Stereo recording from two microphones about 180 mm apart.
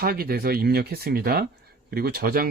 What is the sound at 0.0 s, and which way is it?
Speech, 55° right (ahead or behind).